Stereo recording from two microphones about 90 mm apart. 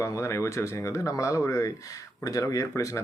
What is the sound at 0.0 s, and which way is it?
Speech, 35° left (ahead or behind).